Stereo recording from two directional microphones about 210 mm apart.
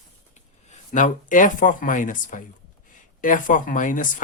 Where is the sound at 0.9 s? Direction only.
35° left (ahead or behind).